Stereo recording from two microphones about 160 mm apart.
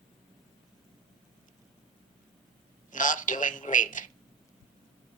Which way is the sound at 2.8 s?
55° left (ahead or behind).